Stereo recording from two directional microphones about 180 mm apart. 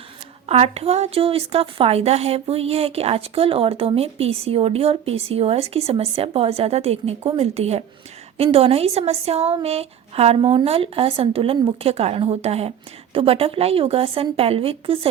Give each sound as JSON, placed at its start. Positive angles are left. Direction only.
{"t": 0.4, "sound": "speech", "side_deg": -35}